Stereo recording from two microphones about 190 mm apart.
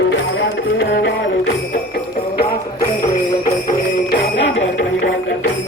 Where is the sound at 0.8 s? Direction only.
65° left (ahead or behind).